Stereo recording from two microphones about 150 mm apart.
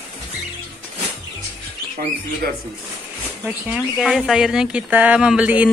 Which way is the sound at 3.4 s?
5° right (ahead or behind).